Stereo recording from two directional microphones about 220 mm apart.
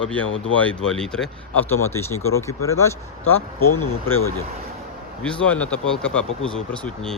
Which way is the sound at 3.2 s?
70° left (ahead or behind).